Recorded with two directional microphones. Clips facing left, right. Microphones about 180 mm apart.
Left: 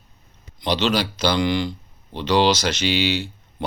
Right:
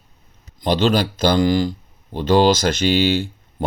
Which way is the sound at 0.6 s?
45° right (ahead or behind).